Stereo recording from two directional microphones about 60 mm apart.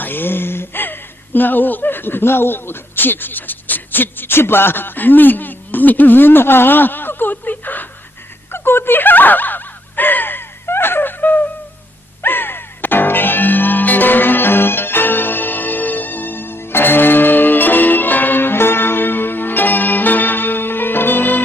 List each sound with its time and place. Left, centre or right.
0.0 s speech: left
8.5 s a sound: left
12.2 s music: left